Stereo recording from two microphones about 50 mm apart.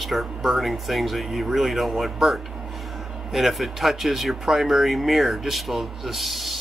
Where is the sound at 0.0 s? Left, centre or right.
Centre.